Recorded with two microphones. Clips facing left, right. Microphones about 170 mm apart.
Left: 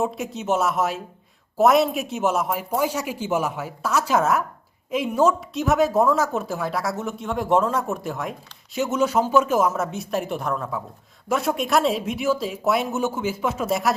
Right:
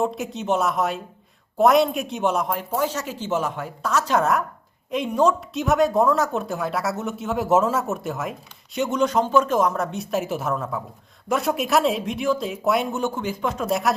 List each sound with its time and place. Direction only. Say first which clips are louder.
0.0 s speech: right 1 dB; centre (ahead or behind)